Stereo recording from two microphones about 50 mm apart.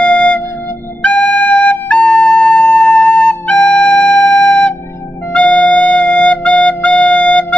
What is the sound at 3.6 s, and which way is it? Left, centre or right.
Flute, centre.